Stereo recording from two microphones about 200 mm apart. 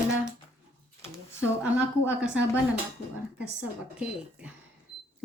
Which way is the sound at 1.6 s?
5° right (ahead or behind).